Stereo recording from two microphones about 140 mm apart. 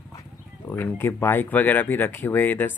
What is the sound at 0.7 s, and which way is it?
Speech, 15° left (ahead or behind).